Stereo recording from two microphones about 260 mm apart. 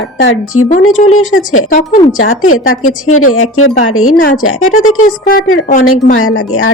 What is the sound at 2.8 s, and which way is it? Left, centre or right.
Speech, left.